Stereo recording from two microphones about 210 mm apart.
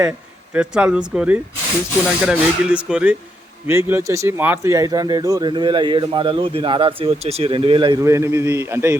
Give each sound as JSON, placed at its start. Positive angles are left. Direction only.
{"t": 0.5, "sound": "speech", "side_deg": -5}